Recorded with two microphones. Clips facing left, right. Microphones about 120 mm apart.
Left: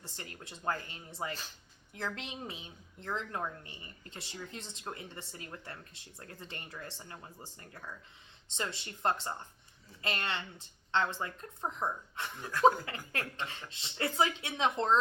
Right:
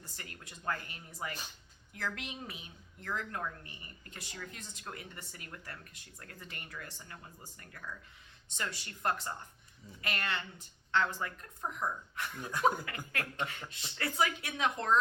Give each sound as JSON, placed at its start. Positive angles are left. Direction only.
{"t": 0.0, "sound": "a woman's voice", "side_deg": 25}